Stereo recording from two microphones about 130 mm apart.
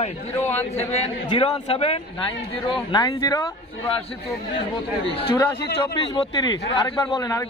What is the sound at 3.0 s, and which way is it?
Speech, 25° left (ahead or behind).